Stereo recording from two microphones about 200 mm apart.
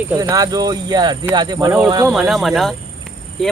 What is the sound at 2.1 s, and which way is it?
Speech, centre (ahead or behind).